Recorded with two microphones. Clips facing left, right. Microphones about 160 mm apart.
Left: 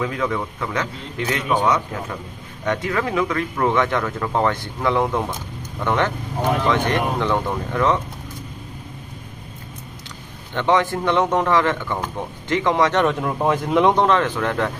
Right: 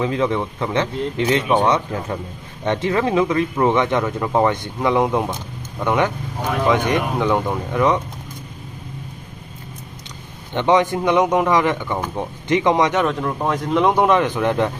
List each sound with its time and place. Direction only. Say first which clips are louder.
0.0 s a man's voice: right 4 dB; 25° right (ahead or behind)
10.5 s a man's voice: right 2 dB; 20° right (ahead or behind)
13.0 s speech: left 1 dB; centre (ahead or behind); by 14.7 s 20° right (ahead or behind)